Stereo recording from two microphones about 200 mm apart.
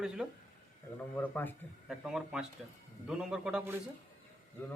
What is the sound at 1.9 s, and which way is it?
A man's voice, 5° right (ahead or behind).